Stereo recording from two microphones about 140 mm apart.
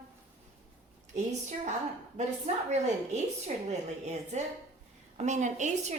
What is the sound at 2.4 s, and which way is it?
A woman's voice, 55° right (ahead or behind).